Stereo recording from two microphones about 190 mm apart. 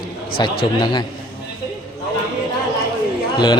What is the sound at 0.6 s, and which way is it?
Speech, 25° left (ahead or behind).